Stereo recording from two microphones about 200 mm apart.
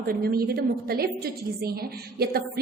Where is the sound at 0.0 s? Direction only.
50° right (ahead or behind).